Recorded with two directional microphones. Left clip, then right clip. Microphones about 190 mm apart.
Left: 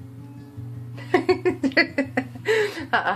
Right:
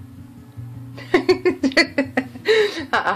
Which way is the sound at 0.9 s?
5° right (ahead or behind).